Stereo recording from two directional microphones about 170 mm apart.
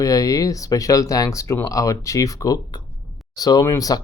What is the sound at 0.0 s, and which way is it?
Speech, 20° left (ahead or behind).